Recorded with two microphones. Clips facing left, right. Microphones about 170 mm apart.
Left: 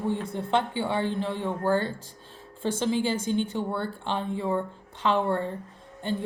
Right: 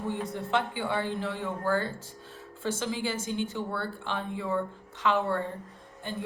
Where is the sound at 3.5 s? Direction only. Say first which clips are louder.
Left 4 dB; 25° left (ahead or behind).